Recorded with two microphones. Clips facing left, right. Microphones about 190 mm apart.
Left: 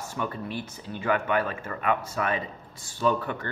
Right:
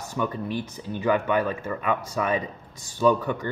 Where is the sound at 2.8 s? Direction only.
15° right (ahead or behind).